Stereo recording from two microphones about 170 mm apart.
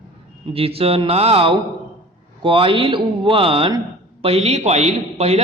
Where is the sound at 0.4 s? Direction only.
35° right (ahead or behind).